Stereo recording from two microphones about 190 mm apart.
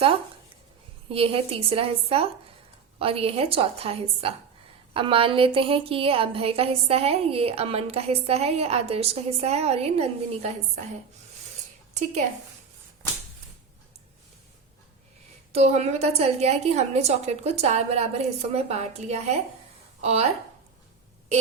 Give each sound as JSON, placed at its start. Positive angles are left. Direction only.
{"t": 1.1, "sound": "a woman's voice", "side_deg": -30}
{"t": 15.5, "sound": "a woman's voice", "side_deg": -35}